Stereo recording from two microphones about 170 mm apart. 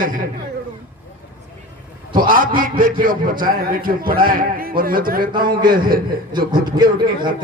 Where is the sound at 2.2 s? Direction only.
55° right (ahead or behind).